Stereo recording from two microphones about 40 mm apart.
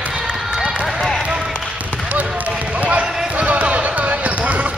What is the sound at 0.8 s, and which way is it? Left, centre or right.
Basketball bounce, centre.